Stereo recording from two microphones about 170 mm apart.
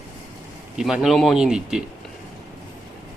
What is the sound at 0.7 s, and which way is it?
A man's voice, 5° right (ahead or behind).